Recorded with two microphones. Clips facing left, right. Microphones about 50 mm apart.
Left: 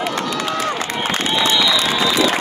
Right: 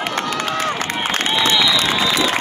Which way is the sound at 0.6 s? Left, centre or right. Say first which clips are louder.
Even; right.